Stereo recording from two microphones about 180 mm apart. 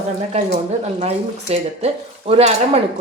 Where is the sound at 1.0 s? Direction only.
35° right (ahead or behind).